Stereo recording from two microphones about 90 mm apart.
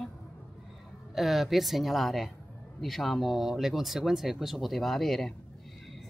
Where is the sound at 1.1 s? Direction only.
Centre (ahead or behind).